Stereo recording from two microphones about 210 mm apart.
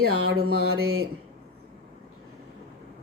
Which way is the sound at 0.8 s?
75° right (ahead or behind).